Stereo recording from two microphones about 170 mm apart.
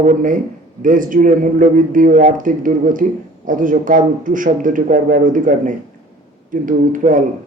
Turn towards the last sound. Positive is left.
turn(degrees=-50)  # may be behind; listen again after turning